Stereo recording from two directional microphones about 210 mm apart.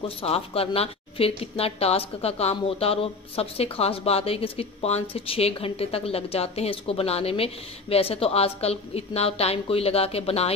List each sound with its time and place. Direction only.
0.2 s a woman's voice: 25° left (ahead or behind)